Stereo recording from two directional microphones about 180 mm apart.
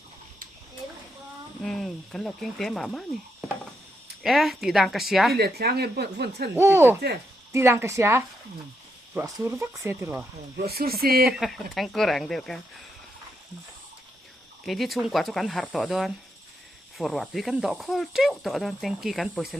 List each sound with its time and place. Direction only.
1.6 s speech: centre (ahead or behind)
4.2 s speech: centre (ahead or behind)
5.4 s speech: 60° right (ahead or behind)
6.6 s speech: 15° right (ahead or behind)
10.6 s speech: 60° right (ahead or behind)
11.3 s speech: centre (ahead or behind)
14.6 s speech: centre (ahead or behind)